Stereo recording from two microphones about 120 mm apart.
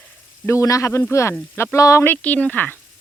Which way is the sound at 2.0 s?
10° left (ahead or behind).